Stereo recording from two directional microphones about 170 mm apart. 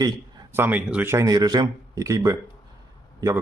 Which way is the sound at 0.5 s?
10° right (ahead or behind).